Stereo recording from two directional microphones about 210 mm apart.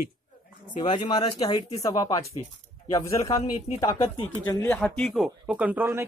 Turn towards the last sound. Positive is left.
turn(degrees=-10)  # may be behind; listen again after turning